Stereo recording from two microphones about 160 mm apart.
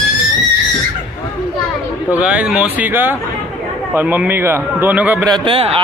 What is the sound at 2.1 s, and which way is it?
A man's voice, 5° right (ahead or behind).